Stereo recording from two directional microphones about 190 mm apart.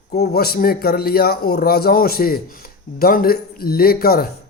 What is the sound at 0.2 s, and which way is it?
Speech, 55° left (ahead or behind).